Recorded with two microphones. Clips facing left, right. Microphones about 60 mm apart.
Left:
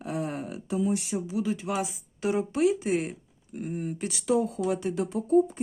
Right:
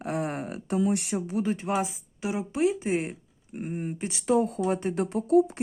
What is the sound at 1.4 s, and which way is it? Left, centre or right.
Speech, right.